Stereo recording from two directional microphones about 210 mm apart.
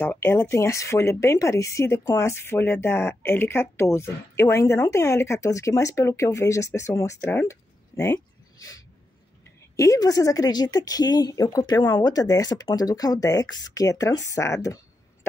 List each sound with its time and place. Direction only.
0.0 s speech: 10° left (ahead or behind)
9.8 s speech: 15° left (ahead or behind)